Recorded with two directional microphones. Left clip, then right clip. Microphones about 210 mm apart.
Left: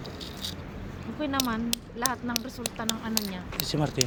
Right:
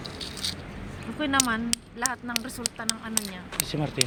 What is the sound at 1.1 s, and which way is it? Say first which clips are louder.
Speech: right 4 dB; 5° left (ahead or behind).